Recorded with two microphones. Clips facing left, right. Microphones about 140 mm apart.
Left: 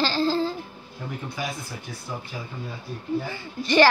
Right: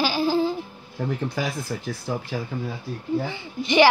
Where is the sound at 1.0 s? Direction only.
90° right.